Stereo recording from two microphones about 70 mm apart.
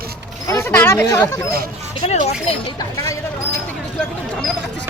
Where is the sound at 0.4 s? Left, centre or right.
Left.